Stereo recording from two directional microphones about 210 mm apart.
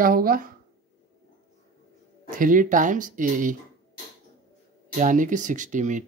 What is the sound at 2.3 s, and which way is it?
Speech, 40° right (ahead or behind).